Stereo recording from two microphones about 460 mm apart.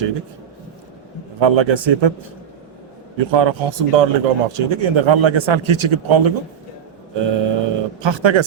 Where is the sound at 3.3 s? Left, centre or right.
Right.